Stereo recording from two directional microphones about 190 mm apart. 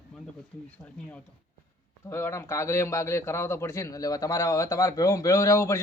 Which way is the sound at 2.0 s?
15° left (ahead or behind).